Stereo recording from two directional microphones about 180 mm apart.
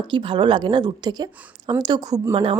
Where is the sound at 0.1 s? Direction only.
25° right (ahead or behind).